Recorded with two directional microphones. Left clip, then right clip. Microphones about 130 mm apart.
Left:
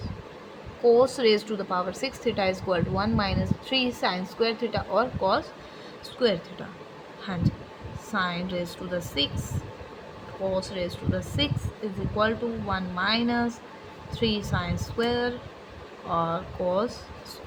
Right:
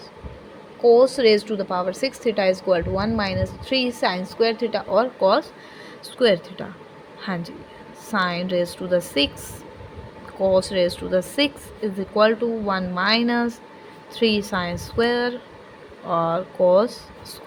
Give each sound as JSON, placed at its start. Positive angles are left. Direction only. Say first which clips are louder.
{"t": 0.9, "sound": "speech", "louder": "right 5 dB", "side_deg": -35}
{"t": 6.1, "sound": "speech", "louder": "right 7 dB", "side_deg": -65}
{"t": 7.3, "sound": "speech", "louder": "right 3 dB", "side_deg": -75}
{"t": 10.5, "sound": "speech", "louder": "right 12 dB", "side_deg": -90}
{"t": 12.1, "sound": "speech", "louder": "right 8 dB", "side_deg": -65}